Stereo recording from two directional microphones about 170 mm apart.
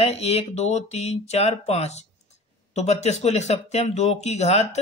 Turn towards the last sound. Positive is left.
turn(degrees=40)  # may be behind; listen again after turning